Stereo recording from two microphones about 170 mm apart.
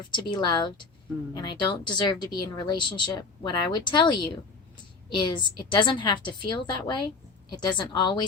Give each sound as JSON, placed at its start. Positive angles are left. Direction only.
{"t": 0.1, "sound": "speech", "side_deg": 25}